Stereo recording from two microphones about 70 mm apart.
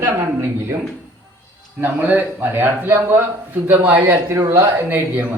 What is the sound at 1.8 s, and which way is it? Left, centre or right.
A man's voice, right.